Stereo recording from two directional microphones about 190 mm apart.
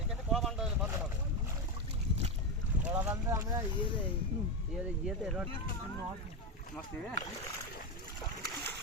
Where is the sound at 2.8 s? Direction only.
10° right (ahead or behind).